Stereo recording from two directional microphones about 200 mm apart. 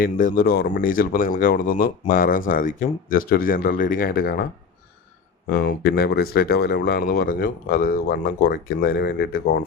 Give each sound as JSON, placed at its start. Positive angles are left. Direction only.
{"t": 0.0, "sound": "speech", "side_deg": 45}
{"t": 5.5, "sound": "speech", "side_deg": 55}